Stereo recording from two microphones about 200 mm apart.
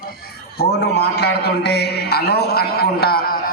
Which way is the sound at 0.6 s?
55° left (ahead or behind).